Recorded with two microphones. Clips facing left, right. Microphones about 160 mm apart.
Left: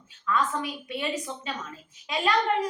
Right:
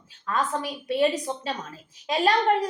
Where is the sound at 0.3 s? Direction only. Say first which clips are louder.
Even; 35° right (ahead or behind).